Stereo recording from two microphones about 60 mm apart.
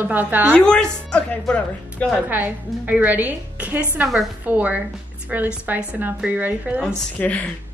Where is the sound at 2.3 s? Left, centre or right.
Right.